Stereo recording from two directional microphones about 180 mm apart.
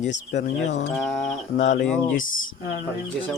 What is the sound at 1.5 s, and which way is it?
Speech, 45° left (ahead or behind).